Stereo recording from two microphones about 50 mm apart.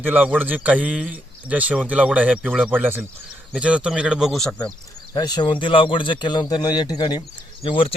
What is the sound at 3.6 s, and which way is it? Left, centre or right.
Speech, right.